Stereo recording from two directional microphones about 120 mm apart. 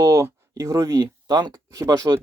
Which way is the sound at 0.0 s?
30° right (ahead or behind).